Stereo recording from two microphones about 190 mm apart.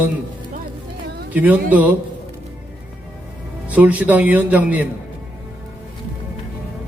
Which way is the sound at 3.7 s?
10° right (ahead or behind).